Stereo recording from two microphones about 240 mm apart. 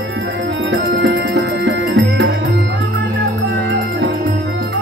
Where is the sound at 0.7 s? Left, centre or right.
Right.